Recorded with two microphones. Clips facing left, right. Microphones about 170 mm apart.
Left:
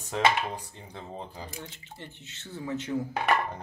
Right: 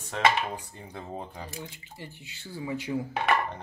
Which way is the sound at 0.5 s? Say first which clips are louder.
Right 1 dB; 5° right (ahead or behind).